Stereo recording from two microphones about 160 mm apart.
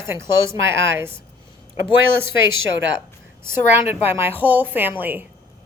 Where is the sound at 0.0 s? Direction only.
15° right (ahead or behind).